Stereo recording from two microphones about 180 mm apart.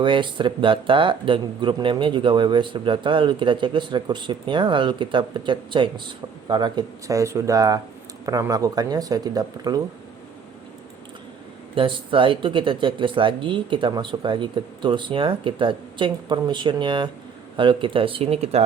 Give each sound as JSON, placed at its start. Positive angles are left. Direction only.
{"t": 0.0, "sound": "speech", "side_deg": -25}
{"t": 11.7, "sound": "speech", "side_deg": -30}